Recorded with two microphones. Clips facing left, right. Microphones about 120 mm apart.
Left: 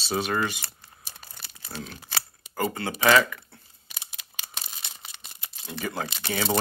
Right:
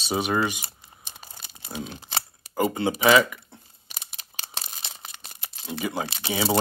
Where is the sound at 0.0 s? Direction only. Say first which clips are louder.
Right 2 dB; 15° right (ahead or behind).